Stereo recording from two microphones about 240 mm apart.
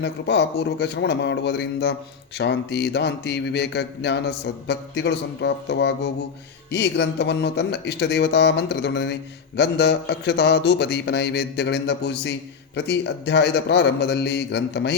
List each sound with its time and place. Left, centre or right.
0.0 s speech: left